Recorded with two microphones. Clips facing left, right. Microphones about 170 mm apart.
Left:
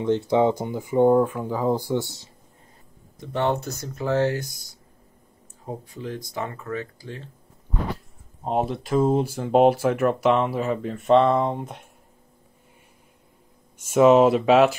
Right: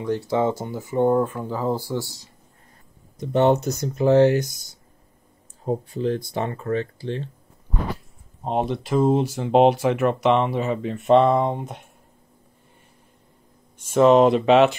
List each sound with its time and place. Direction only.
0.0 s speech: 20° left (ahead or behind)
3.2 s speech: 20° right (ahead or behind)
5.7 s speech: 30° right (ahead or behind)
8.5 s speech: centre (ahead or behind)
13.7 s speech: 10° left (ahead or behind)